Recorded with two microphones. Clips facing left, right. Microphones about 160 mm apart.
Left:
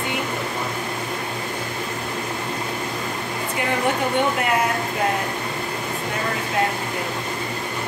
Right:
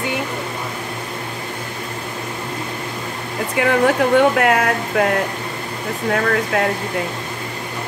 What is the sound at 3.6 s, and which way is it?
Speech, 90° right.